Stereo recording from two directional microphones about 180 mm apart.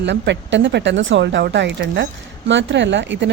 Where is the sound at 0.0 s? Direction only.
80° right.